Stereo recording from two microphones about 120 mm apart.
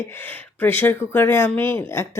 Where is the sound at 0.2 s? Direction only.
15° left (ahead or behind).